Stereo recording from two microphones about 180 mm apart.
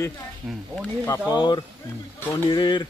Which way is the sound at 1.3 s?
25° left (ahead or behind).